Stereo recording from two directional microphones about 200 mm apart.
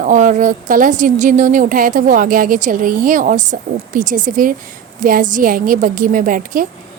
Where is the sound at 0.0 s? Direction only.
40° right (ahead or behind).